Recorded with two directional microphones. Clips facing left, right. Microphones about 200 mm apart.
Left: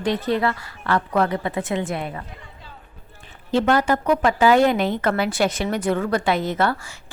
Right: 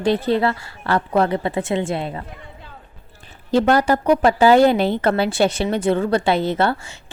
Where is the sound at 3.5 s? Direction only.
35° right (ahead or behind).